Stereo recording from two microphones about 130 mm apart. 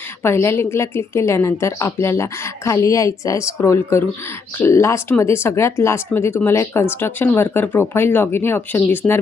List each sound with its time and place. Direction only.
0.2 s a woman's voice: 20° left (ahead or behind)